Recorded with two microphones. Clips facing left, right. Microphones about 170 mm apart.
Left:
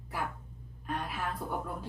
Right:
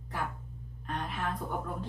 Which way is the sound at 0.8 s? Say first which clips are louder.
Even; 5° left (ahead or behind).